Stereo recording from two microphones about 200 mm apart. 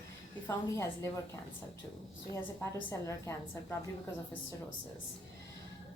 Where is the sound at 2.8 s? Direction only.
15° left (ahead or behind).